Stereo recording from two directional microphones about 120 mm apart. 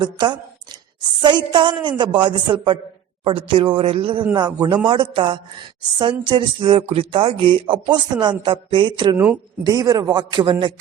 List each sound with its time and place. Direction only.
0.0 s a woman's voice: 40° right (ahead or behind)
4.4 s a woman's voice: 35° right (ahead or behind)
9.1 s speech: 15° right (ahead or behind)
9.6 s a woman's voice: 30° right (ahead or behind)